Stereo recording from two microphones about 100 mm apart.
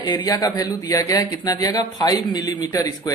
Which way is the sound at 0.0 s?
45° left (ahead or behind).